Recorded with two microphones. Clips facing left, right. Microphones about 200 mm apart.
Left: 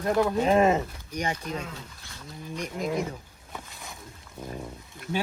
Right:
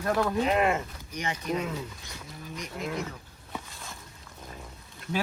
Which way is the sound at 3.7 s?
15° left (ahead or behind).